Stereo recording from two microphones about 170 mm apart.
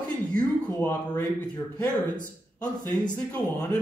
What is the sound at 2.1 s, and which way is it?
Speech, 25° left (ahead or behind).